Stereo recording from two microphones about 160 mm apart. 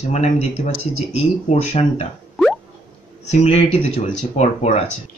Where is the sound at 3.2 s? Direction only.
40° left (ahead or behind).